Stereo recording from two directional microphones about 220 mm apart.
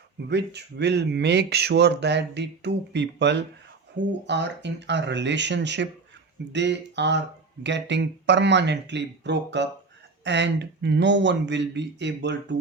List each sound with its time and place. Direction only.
0.3 s speech: 50° right (ahead or behind)